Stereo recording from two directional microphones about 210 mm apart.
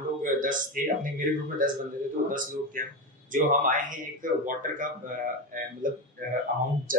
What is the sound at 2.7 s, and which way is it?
Speech, 40° right (ahead or behind).